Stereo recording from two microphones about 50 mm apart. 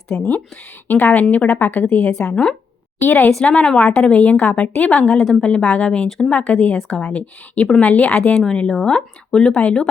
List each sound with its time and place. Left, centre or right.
0.1 s speech: centre
0.9 s a woman's voice: left
3.0 s a woman's voice: left
3.4 s a woman's voice: left
6.1 s speech: centre
6.3 s a woman's voice: left
8.4 s a woman's voice: centre